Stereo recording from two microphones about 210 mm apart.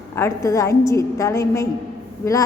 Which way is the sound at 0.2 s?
15° left (ahead or behind).